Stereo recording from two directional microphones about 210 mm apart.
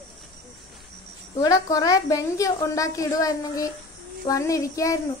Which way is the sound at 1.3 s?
15° left (ahead or behind).